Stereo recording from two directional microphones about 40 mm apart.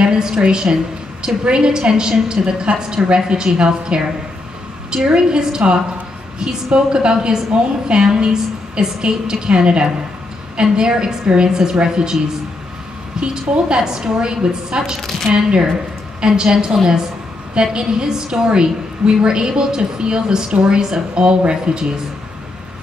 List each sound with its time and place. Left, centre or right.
0.0 s a woman's voice: centre
13.2 s a woman's voice: right